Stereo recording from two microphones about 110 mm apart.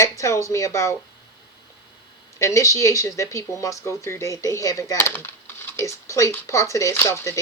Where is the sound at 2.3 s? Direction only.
30° left (ahead or behind).